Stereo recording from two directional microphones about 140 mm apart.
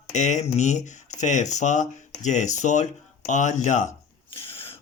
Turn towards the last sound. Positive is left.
turn(degrees=45)  # may be behind; listen again after turning